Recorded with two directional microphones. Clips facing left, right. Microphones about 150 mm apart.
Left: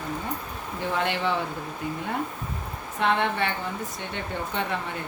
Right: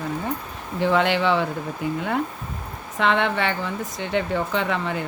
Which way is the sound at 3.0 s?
90° right.